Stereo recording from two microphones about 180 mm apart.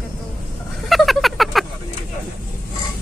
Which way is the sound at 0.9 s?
Centre (ahead or behind).